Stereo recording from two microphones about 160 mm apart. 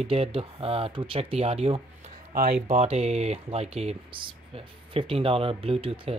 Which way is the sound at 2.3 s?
70° right (ahead or behind).